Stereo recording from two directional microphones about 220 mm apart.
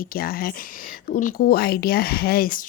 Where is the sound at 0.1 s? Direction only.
40° left (ahead or behind).